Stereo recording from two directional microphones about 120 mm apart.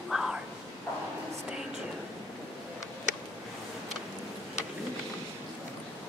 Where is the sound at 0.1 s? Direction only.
5° right (ahead or behind).